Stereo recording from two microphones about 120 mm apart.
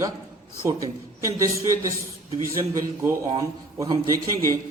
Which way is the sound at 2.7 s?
25° right (ahead or behind).